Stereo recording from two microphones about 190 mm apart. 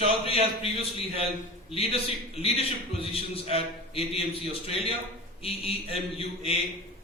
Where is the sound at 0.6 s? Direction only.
30° left (ahead or behind).